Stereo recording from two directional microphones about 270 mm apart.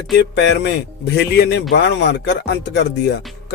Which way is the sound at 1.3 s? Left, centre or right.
Left.